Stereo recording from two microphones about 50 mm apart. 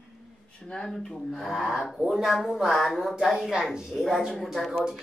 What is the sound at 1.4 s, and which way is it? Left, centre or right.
A woman's voice, centre.